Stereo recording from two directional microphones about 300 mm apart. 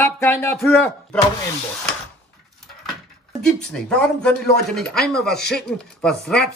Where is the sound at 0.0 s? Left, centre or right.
Centre.